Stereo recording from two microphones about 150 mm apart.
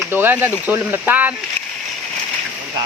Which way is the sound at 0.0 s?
15° right (ahead or behind).